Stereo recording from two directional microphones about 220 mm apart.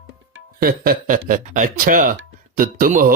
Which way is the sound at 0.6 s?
40° right (ahead or behind).